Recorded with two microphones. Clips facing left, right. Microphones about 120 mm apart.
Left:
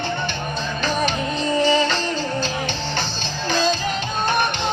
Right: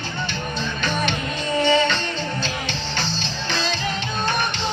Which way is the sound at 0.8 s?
35° left (ahead or behind).